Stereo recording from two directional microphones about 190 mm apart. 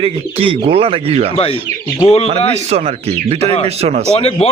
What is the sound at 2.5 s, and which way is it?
Speech, 35° right (ahead or behind).